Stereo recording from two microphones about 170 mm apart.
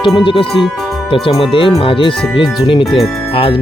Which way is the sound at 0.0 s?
30° left (ahead or behind).